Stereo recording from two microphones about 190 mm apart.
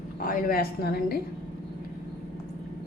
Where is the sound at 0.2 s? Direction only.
50° left (ahead or behind).